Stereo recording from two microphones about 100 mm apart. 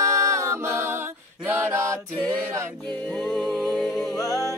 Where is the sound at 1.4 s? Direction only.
25° right (ahead or behind).